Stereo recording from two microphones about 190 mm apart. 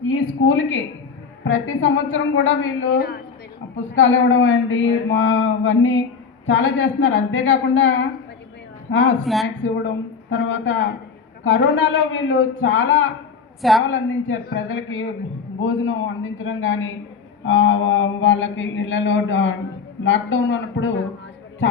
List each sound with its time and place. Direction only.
0.2 s a man's voice: 90° left
5.1 s mantra: 80° left
6.5 s mantra: 75° left (ahead or behind)
9.2 s speech: centre (ahead or behind)
9.6 s a man's voice: 85° left
13.6 s speech: centre (ahead or behind)
13.8 s a man's voice: 90° left
17.8 s mantra: 90° left